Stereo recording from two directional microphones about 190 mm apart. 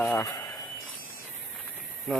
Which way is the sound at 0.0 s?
10° left (ahead or behind).